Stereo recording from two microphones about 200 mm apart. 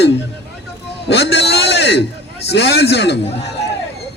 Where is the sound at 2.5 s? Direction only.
55° left (ahead or behind).